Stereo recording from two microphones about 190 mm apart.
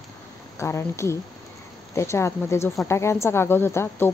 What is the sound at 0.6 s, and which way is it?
A woman's voice, 15° left (ahead or behind).